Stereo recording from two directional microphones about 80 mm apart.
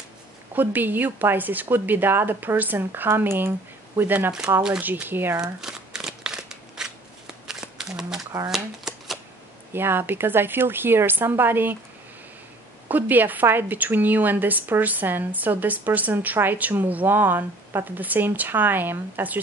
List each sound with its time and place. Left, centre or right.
0.6 s a woman's voice: right
4.6 s a woman's voice: centre
5.4 s crumpling: centre
7.4 s a sound: centre
8.5 s shuffling cards: centre
9.7 s a woman's voice: right
12.8 s a woman's voice: right